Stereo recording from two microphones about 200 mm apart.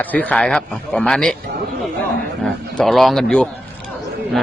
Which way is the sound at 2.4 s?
Centre (ahead or behind).